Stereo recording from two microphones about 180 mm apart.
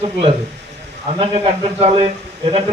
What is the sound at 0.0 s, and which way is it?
Speech, 30° right (ahead or behind).